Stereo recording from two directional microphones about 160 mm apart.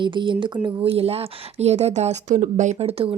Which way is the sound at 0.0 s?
30° right (ahead or behind).